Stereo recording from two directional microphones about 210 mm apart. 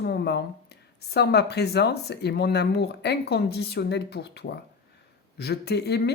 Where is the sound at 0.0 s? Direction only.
50° left (ahead or behind).